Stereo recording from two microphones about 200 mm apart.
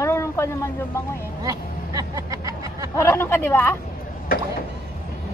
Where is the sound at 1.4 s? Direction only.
15° right (ahead or behind).